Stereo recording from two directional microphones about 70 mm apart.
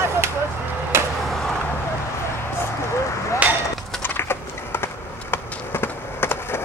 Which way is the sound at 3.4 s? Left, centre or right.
Centre.